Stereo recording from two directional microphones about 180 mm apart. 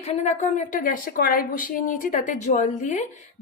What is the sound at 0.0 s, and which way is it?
A woman's voice, 40° left (ahead or behind).